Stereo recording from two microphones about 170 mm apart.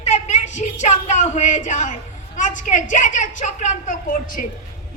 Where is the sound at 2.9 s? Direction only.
45° left (ahead or behind).